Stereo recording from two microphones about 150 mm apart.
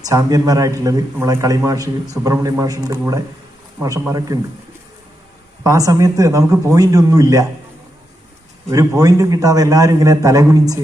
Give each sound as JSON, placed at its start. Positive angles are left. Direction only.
{"t": 0.0, "sound": "speech", "side_deg": -25}
{"t": 5.6, "sound": "speech", "side_deg": -20}
{"t": 8.7, "sound": "speech", "side_deg": -20}